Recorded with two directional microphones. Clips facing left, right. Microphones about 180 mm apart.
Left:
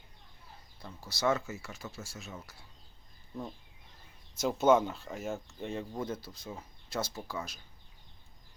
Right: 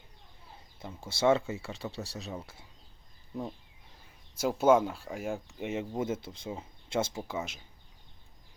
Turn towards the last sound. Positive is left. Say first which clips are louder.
# right 4 dB
turn(degrees=-25)  # may be behind; listen again after turning